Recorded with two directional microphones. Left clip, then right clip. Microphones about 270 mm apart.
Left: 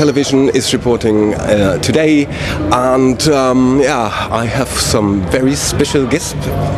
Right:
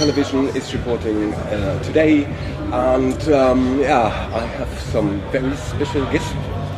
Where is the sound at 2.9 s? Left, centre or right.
Left.